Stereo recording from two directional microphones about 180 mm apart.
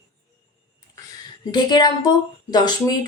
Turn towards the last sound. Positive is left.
turn(degrees=20)  # may be behind; listen again after turning